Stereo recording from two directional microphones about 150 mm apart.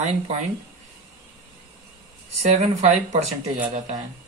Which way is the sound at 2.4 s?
50° right (ahead or behind).